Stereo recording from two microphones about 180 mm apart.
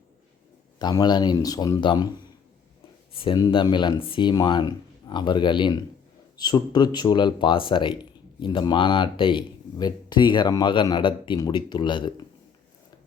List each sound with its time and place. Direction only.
0.8 s speech: 25° left (ahead or behind)